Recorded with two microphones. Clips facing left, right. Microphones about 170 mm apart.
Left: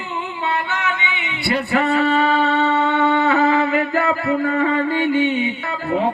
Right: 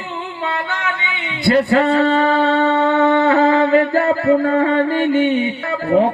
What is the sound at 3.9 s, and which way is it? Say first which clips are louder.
Music: right 5 dB; 45° right (ahead or behind).